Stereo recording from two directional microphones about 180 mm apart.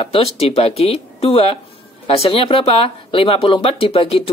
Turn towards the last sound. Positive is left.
turn(degrees=30)  # may be behind; listen again after turning